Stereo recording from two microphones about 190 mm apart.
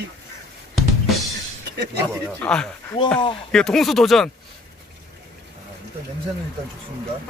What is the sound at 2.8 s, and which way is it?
Speech, 25° left (ahead or behind).